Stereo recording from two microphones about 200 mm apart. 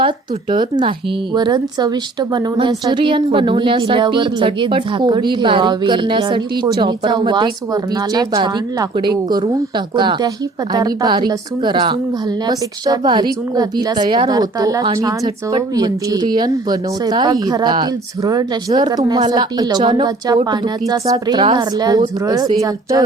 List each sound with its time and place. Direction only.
0.5 s speech: 25° right (ahead or behind)